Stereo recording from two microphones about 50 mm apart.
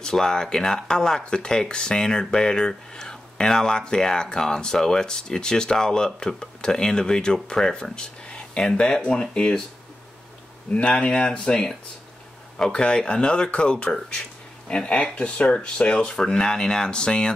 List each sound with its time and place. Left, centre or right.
0.0 s speech: centre
10.7 s speech: left